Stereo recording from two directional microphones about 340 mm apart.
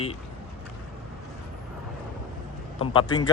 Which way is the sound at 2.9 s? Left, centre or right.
Centre.